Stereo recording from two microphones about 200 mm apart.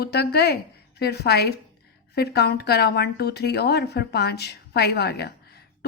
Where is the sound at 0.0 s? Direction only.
55° left (ahead or behind).